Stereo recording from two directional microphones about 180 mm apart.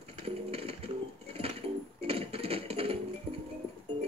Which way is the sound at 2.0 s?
30° right (ahead or behind).